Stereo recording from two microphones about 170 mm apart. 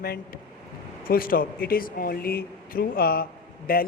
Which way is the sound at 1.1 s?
55° left (ahead or behind).